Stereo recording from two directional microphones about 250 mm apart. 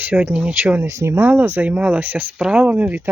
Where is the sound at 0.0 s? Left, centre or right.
Centre.